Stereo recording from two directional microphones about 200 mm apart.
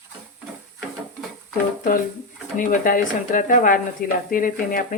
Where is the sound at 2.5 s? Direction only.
40° left (ahead or behind).